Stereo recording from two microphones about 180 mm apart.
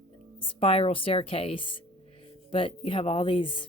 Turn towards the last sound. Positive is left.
turn(degrees=30)  # may be behind; listen again after turning